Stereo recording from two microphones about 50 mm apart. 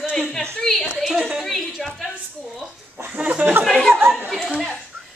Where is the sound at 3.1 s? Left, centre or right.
Right.